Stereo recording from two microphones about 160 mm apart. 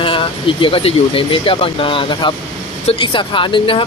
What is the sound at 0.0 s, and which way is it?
Speech, 35° left (ahead or behind).